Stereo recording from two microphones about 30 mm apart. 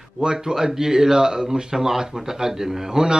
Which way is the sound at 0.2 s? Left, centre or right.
Right.